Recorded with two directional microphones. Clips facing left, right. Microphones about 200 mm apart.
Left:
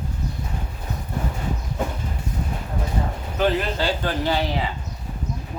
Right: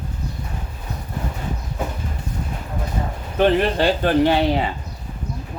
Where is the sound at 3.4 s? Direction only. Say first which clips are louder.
Right 5 dB; 60° right (ahead or behind).